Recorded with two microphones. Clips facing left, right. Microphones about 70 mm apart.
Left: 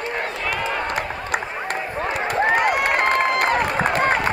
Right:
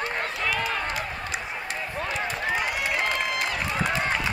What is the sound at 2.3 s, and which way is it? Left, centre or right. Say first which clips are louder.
Run: left 9 dB; left.